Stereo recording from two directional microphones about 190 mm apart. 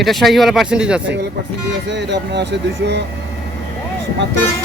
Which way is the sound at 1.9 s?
65° right (ahead or behind).